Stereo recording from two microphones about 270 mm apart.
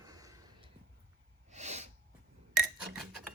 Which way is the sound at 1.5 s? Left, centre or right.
Right.